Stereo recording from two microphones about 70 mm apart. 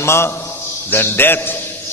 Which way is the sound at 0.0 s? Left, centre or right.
Left.